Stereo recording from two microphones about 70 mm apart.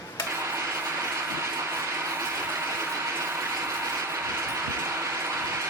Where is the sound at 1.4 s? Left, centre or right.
Right.